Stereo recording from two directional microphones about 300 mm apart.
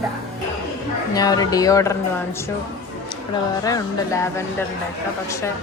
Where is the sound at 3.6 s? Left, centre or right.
Centre.